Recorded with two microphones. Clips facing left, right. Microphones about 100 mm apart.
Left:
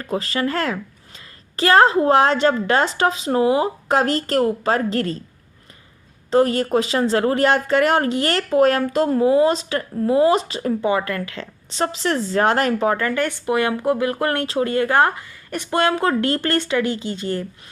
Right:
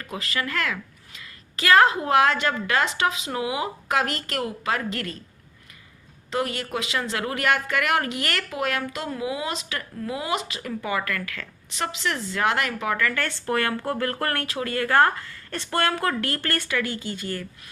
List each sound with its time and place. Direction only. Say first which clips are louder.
0.0 s speech: left 8 dB; 35° left (ahead or behind)
6.3 s speech: left 11 dB; 35° left (ahead or behind)
13.2 s speech: left 5 dB; 15° left (ahead or behind)